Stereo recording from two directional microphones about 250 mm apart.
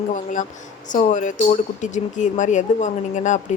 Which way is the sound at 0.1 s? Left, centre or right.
Left.